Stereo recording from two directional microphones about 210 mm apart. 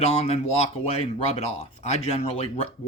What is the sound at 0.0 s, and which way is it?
Speech, 30° left (ahead or behind).